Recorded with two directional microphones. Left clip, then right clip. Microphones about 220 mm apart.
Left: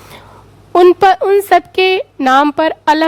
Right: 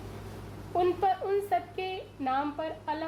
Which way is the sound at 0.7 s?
50° left (ahead or behind).